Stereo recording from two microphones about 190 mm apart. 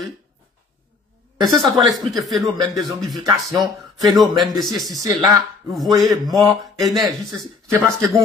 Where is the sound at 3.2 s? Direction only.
20° right (ahead or behind).